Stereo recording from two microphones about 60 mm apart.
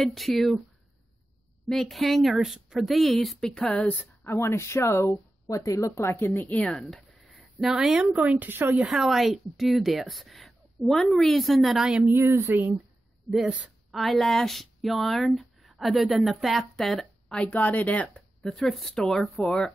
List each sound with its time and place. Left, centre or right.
0.0 s speech: centre
1.7 s speech: centre
4.2 s a woman's voice: left
5.5 s a woman's voice: left
6.8 s a sound: centre
7.3 s speech: centre
8.0 s speech: right
8.8 s speech: centre
12.0 s speech: right
13.9 s speech: centre
17.4 s speech: left
18.1 s speech: centre